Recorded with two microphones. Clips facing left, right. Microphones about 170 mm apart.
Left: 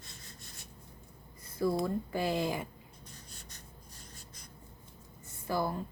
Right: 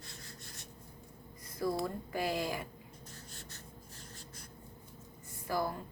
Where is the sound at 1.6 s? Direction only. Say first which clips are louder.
Left 4 dB; 25° left (ahead or behind).